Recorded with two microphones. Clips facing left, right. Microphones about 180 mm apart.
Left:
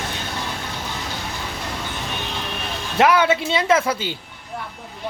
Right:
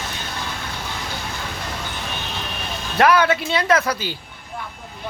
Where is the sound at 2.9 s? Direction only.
20° left (ahead or behind).